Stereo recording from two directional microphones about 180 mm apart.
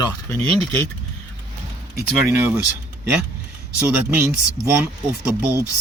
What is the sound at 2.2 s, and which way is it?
Speech, 10° right (ahead or behind).